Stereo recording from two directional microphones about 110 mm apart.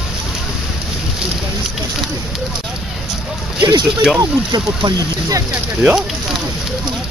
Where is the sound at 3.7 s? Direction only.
40° right (ahead or behind).